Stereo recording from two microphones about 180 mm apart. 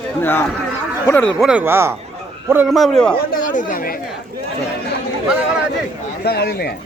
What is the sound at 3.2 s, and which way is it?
Chatter, 50° left (ahead or behind).